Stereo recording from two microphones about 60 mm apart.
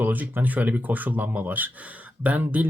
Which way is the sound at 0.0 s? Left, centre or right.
Right.